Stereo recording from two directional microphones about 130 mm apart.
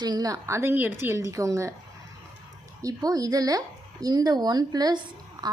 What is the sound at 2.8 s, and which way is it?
A woman's voice, 30° right (ahead or behind).